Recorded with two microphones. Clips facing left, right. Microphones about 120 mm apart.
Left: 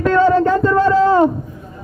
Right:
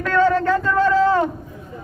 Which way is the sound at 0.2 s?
20° left (ahead or behind).